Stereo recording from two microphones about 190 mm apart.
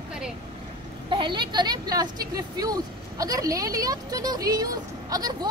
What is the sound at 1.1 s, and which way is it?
Speech, 25° right (ahead or behind).